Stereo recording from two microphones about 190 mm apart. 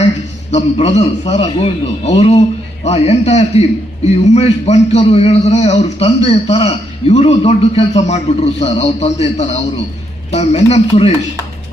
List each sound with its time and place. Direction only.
0.5 s a man's voice: 35° left (ahead or behind)